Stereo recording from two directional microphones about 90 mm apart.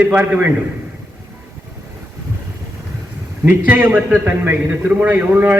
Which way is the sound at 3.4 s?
20° right (ahead or behind).